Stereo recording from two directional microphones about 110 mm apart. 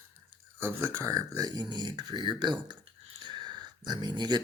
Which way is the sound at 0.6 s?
25° right (ahead or behind).